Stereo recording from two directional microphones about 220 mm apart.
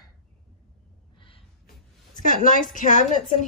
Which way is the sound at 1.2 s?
25° left (ahead or behind).